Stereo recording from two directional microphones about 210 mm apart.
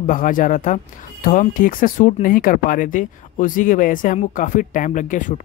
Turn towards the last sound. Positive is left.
turn(degrees=35)  # may be behind; listen again after turning